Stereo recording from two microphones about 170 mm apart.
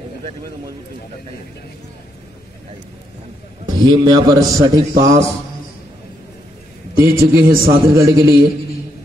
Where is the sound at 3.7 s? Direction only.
25° right (ahead or behind).